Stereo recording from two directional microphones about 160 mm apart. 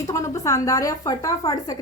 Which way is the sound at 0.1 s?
20° left (ahead or behind).